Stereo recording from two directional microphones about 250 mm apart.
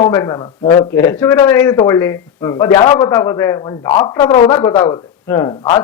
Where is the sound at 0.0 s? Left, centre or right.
Centre.